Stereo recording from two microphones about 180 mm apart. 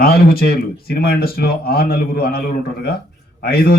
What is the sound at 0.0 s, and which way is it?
A man's voice, 55° left (ahead or behind).